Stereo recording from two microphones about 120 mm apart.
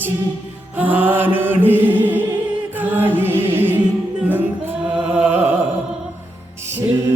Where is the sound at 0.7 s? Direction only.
15° right (ahead or behind).